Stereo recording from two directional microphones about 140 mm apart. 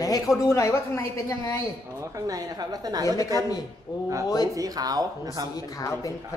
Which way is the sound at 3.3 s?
25° left (ahead or behind).